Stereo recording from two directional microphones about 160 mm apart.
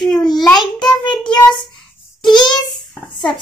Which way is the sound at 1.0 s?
30° left (ahead or behind).